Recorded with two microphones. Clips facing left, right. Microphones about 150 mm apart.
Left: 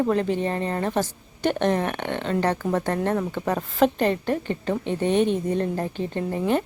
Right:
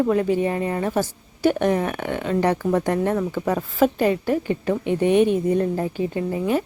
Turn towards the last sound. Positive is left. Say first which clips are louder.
# right 1 dB
turn(degrees=-10)  # may be behind; listen again after turning